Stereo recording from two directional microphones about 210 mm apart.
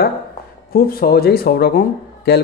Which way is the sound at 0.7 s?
45° left (ahead or behind).